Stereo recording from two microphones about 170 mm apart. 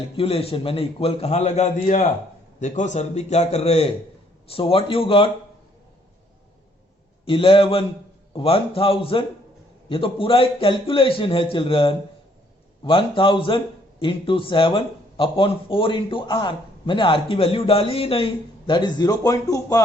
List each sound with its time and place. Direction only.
0.2 s speech: 35° left (ahead or behind)
7.3 s speech: 30° left (ahead or behind)